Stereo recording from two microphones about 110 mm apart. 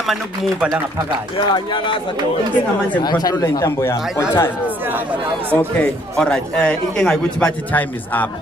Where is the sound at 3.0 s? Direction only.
35° left (ahead or behind).